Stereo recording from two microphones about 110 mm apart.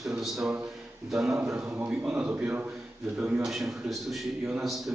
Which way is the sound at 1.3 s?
25° right (ahead or behind).